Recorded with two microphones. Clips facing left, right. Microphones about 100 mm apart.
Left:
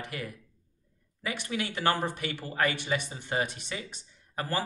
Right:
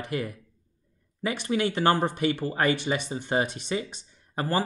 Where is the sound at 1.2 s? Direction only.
30° right (ahead or behind).